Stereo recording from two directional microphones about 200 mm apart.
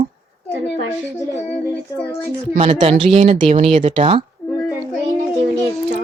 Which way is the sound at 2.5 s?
25° right (ahead or behind).